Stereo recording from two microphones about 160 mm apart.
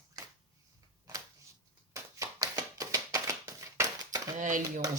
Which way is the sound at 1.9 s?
20° right (ahead or behind).